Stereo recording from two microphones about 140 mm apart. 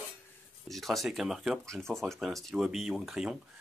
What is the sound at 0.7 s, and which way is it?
Speech, centre (ahead or behind).